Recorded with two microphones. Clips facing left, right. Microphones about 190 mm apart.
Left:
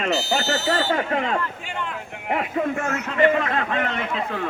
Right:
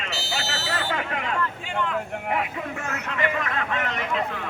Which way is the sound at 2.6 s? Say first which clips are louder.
Left 7 dB; 40° left (ahead or behind).